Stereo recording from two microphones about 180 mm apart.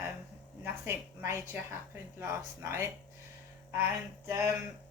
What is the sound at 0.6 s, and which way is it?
A woman's voice, 15° right (ahead or behind).